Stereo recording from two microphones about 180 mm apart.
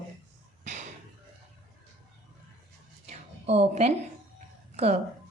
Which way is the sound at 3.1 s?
35° right (ahead or behind).